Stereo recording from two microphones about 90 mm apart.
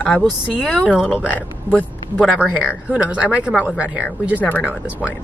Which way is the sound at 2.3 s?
5° right (ahead or behind).